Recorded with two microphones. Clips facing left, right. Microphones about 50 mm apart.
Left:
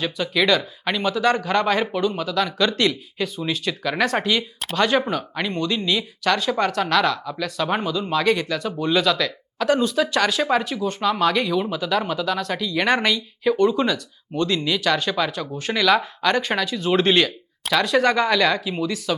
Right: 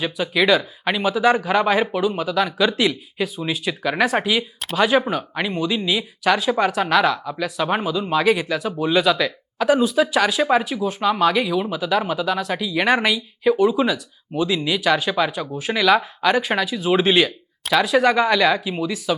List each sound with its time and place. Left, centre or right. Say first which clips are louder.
0.0 s speech: right 2 dB; centre